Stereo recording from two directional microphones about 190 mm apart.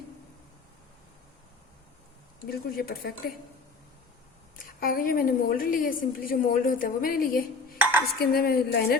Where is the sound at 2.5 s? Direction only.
50° left (ahead or behind).